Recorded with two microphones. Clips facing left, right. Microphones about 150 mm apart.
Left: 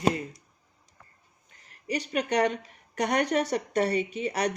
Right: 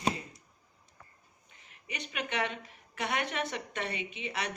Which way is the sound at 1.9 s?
40° left (ahead or behind).